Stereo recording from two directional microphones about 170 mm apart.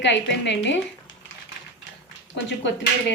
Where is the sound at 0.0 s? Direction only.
90° left.